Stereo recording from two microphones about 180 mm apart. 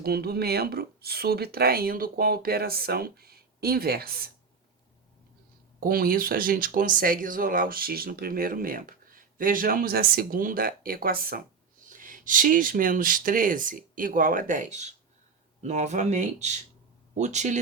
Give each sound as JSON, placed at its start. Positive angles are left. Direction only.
{"t": 0.0, "sound": "speech", "side_deg": -60}
{"t": 5.8, "sound": "speech", "side_deg": -55}